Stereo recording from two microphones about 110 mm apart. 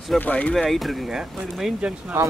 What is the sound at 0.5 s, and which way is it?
Speech, centre (ahead or behind).